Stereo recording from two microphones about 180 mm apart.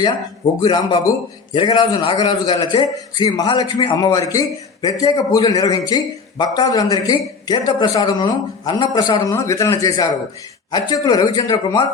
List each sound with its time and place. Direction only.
0.6 s a man's voice: 25° left (ahead or behind)